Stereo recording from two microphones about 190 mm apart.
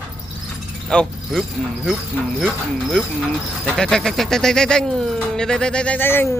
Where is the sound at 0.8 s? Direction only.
Centre (ahead or behind).